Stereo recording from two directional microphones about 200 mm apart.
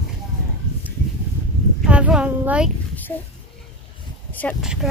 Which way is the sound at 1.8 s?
5° right (ahead or behind).